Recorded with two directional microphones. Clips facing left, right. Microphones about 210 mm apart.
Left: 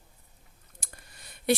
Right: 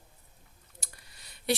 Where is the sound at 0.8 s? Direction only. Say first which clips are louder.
Left 3 dB; 50° left (ahead or behind).